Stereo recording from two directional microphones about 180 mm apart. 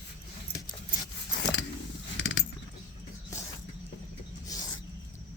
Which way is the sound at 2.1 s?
90° left.